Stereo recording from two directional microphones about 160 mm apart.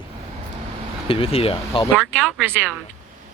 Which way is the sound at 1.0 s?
35° left (ahead or behind).